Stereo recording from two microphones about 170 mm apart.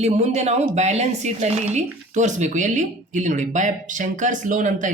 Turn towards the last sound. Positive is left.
turn(degrees=-50)  # may be behind; listen again after turning